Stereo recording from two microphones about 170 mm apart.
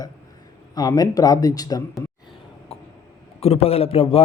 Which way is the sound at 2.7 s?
35° left (ahead or behind).